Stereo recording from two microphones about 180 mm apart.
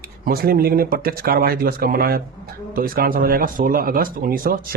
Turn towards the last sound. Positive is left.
turn(degrees=-55)  # may be behind; listen again after turning